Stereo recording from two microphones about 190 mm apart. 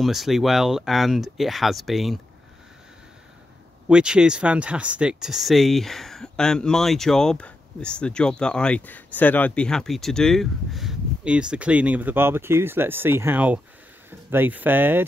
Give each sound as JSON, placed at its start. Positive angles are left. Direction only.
{"t": 0.0, "sound": "speech", "side_deg": 0}
{"t": 3.9, "sound": "speech", "side_deg": -5}